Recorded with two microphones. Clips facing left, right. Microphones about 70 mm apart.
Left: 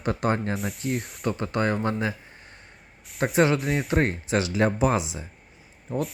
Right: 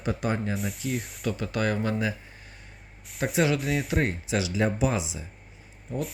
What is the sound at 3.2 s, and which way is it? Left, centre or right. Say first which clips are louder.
Speech: left 3 dB; left.